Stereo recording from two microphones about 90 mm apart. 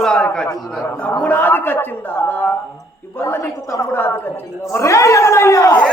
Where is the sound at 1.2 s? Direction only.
20° left (ahead or behind).